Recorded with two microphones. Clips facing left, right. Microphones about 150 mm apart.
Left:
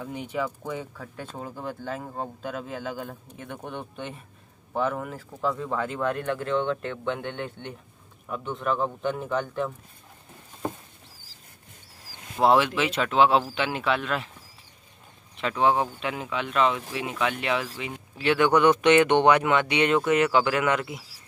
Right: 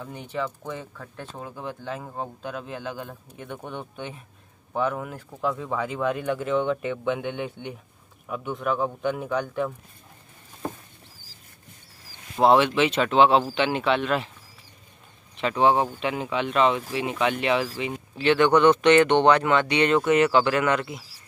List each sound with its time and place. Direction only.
0.0 s speech: 10° left (ahead or behind)
12.5 s speech: 5° left (ahead or behind)
15.5 s speech: 25° right (ahead or behind)
15.8 s speech: centre (ahead or behind)